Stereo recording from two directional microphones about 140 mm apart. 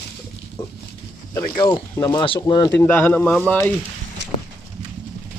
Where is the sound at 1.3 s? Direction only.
30° left (ahead or behind).